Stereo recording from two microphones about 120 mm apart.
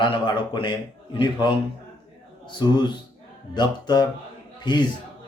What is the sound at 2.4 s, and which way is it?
Speech, 40° left (ahead or behind).